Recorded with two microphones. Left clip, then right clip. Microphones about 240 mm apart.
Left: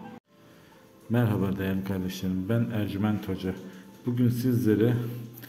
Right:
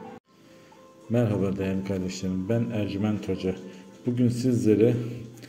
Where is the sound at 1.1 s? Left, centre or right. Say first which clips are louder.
Right 3 dB; centre.